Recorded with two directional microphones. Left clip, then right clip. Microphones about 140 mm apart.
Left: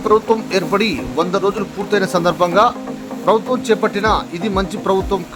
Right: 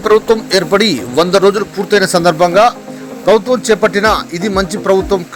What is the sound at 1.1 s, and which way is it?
Speech, 40° right (ahead or behind).